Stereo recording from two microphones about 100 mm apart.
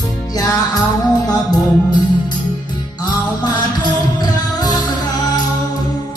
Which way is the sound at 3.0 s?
45° left (ahead or behind).